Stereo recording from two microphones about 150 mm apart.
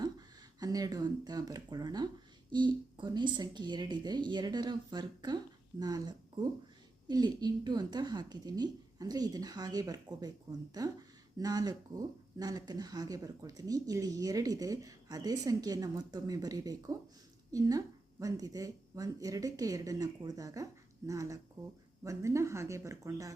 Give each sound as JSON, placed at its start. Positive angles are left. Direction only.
{"t": 0.6, "sound": "speech", "side_deg": -25}